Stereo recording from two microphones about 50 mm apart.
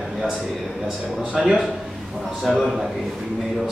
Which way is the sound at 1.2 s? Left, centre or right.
Centre.